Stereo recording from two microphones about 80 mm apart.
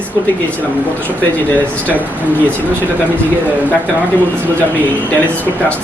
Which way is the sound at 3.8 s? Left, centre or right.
Right.